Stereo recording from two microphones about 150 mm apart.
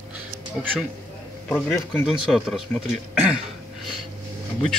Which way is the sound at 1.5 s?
15° left (ahead or behind).